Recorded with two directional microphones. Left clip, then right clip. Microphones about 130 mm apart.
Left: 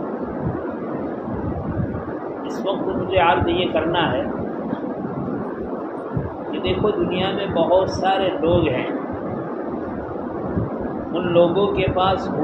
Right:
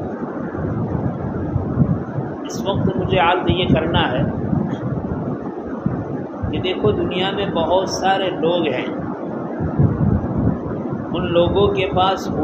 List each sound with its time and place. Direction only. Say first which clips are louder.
2.6 s a man's voice: right 2 dB; 35° right (ahead or behind)
7.2 s a man's voice: right 1 dB; 35° right (ahead or behind)
11.3 s a man's voice: right 1 dB; 35° right (ahead or behind)